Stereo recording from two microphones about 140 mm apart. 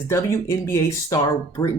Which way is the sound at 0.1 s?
20° left (ahead or behind).